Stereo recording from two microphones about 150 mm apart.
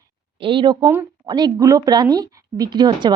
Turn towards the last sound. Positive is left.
turn(degrees=-30)  # may be behind; listen again after turning